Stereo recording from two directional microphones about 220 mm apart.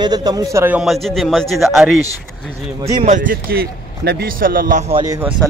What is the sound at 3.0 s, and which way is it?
A man's voice, 35° right (ahead or behind).